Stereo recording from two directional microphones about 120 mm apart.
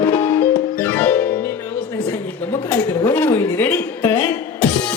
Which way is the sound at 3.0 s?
15° left (ahead or behind).